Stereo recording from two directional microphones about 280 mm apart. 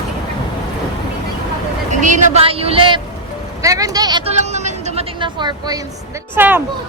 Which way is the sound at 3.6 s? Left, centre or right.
Centre.